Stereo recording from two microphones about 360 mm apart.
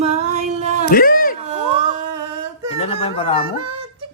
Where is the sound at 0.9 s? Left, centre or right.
Left.